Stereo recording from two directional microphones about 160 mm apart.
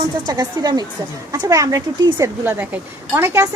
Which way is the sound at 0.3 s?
25° right (ahead or behind).